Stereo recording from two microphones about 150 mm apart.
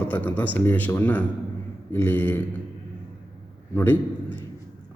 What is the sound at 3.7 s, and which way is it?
Speech, 15° left (ahead or behind).